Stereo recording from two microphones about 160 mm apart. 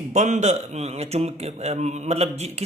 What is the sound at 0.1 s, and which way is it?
Speech, 45° right (ahead or behind).